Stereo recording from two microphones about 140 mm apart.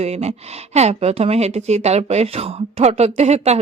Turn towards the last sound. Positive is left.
turn(degrees=-50)  # may be behind; listen again after turning